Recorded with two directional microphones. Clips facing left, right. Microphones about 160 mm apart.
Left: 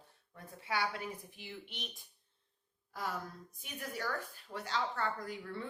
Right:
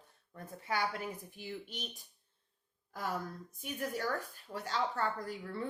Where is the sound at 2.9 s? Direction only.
45° right (ahead or behind).